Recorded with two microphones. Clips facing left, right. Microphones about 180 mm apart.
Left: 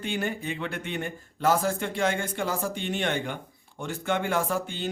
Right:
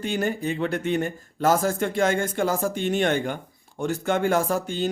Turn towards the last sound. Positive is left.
turn(degrees=-45)  # may be behind; listen again after turning